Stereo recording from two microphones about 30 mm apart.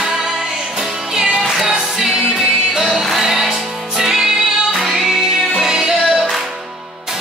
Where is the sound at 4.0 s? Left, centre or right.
Centre.